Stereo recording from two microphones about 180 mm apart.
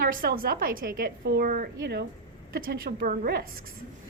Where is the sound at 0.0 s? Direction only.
55° right (ahead or behind).